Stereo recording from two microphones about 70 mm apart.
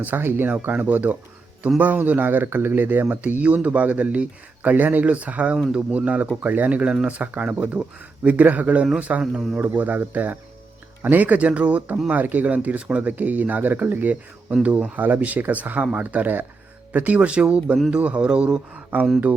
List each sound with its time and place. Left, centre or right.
0.0 s speech: right
9.2 s speech: centre
9.6 s speech: right
18.9 s speech: right